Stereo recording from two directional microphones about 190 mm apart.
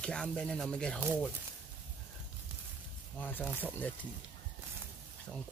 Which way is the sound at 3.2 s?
10° left (ahead or behind).